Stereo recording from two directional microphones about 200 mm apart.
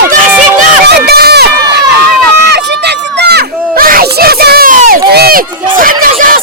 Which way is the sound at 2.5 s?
55° right (ahead or behind).